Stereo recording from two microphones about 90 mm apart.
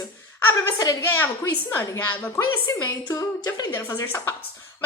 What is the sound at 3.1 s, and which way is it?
Speech, 40° left (ahead or behind).